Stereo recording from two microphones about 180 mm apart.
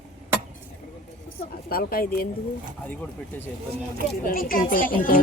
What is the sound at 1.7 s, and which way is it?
Speech, 55° left (ahead or behind).